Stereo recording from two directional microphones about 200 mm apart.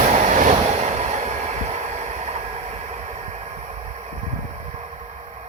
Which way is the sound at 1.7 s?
35° right (ahead or behind).